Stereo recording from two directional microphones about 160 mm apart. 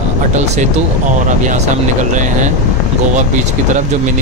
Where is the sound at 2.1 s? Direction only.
50° right (ahead or behind).